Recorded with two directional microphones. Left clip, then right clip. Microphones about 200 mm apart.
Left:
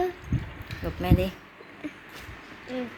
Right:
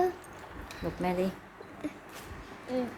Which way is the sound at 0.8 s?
Centre (ahead or behind).